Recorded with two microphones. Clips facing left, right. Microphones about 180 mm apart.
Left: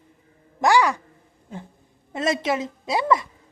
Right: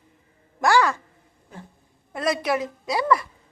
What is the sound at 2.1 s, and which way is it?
A woman's voice, 25° left (ahead or behind).